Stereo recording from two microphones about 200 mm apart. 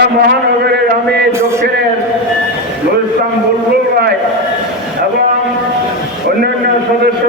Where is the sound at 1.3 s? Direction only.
15° right (ahead or behind).